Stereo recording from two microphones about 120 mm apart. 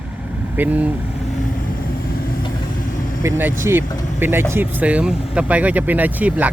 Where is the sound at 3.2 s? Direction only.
20° right (ahead or behind).